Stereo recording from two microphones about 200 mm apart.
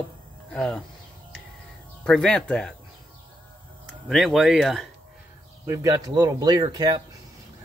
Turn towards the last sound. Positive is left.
turn(degrees=-20)  # may be behind; listen again after turning